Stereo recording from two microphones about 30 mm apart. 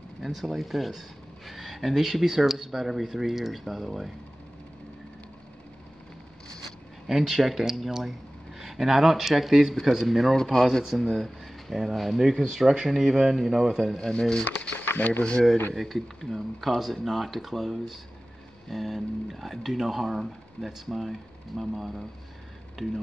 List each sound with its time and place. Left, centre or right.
0.2 s speech: centre
7.1 s speech: centre
12.2 s speech: centre
13.9 s speech: centre
14.4 s speech: left
15.0 s speech: left
15.4 s speech: centre